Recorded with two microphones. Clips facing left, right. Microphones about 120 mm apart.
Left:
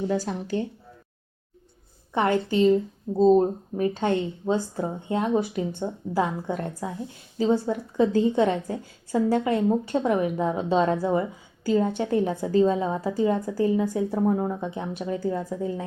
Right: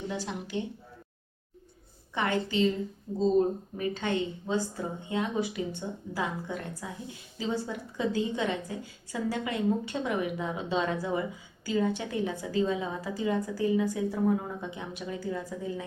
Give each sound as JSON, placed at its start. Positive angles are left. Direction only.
{"t": 0.1, "sound": "a woman's voice", "side_deg": 40}
{"t": 2.1, "sound": "a woman's voice", "side_deg": 45}